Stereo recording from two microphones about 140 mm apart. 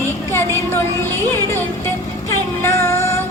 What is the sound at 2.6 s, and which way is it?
Music, 20° left (ahead or behind).